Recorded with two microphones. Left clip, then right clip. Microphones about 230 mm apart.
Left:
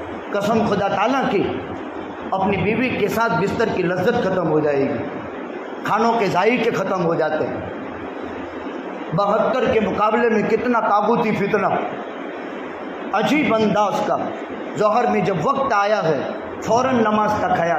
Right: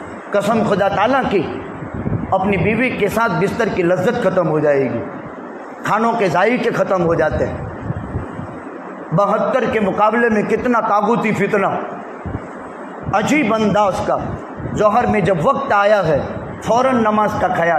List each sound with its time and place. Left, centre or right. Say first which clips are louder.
0.3 s a man's voice: right 4 dB; right
2.6 s a man's voice: right 3 dB; right
5.9 s a man's voice: right 2 dB; right
9.1 s a man's voice: right 3 dB; right
13.1 s a man's voice: right 2 dB; right